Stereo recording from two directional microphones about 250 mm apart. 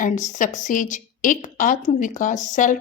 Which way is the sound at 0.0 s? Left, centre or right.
Left.